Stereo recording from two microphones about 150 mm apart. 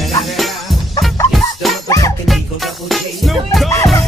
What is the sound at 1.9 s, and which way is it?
Music, 20° left (ahead or behind).